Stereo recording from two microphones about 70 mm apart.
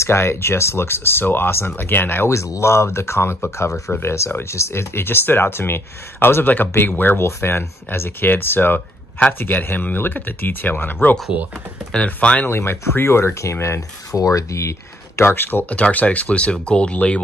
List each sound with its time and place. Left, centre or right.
0.0 s speech: left
7.2 s speech: left
11.9 s speech: centre
12.4 s speech: left
15.7 s speech: left